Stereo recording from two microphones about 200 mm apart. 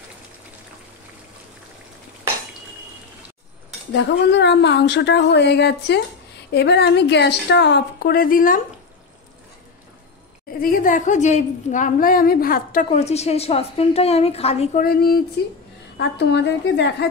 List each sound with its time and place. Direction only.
3.9 s a woman's voice: 60° left (ahead or behind); by 8.5 s 45° left (ahead or behind)
10.6 s a woman's voice: 40° left (ahead or behind)
14.8 s a woman's voice: 50° left (ahead or behind)